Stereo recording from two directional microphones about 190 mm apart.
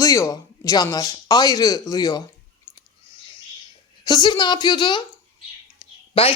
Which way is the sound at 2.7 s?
10° left (ahead or behind).